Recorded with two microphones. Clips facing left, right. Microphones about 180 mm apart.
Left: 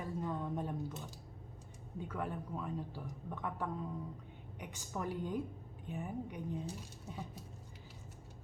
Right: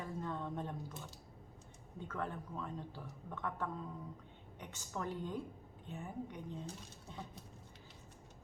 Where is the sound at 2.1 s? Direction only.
10° left (ahead or behind).